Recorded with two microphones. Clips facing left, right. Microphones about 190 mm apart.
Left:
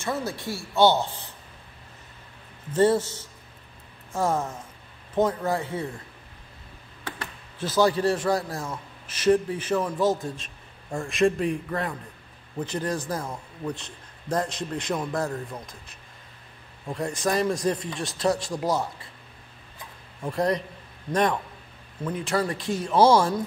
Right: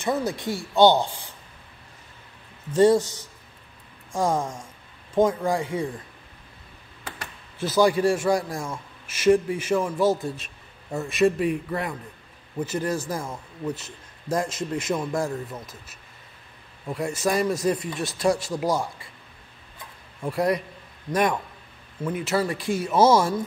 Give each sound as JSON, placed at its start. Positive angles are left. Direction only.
{"t": 0.0, "sound": "a man's voice", "side_deg": -15}
{"t": 2.7, "sound": "a man's voice", "side_deg": -10}
{"t": 4.1, "sound": "a man's voice", "side_deg": -15}
{"t": 7.5, "sound": "a man's voice", "side_deg": -10}
{"t": 20.2, "sound": "a man's voice", "side_deg": -10}